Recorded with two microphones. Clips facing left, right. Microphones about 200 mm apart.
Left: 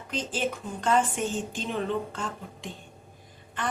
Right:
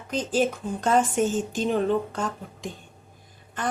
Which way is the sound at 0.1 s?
40° right (ahead or behind).